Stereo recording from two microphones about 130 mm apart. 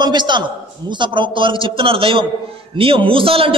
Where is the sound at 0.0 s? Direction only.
35° right (ahead or behind).